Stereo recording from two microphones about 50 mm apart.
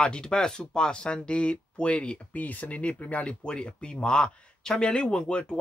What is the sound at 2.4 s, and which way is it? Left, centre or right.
Speech, left.